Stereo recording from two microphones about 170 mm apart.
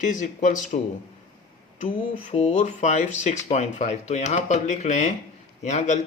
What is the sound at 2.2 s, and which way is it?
Speech, 40° left (ahead or behind).